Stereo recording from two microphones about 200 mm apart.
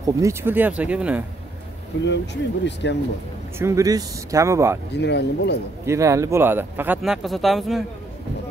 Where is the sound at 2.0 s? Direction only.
60° left (ahead or behind).